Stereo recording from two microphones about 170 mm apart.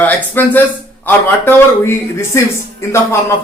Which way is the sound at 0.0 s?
10° left (ahead or behind).